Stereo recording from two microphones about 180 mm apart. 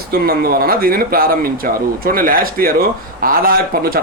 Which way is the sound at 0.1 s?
55° right (ahead or behind).